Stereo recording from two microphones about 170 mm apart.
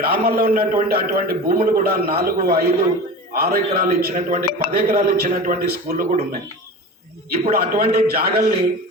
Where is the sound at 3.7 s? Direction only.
50° right (ahead or behind).